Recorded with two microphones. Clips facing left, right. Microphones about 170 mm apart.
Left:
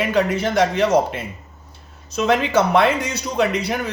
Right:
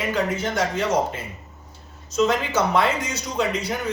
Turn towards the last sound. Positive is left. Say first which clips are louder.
# left 4 dB
turn(degrees=65)  # may be behind; listen again after turning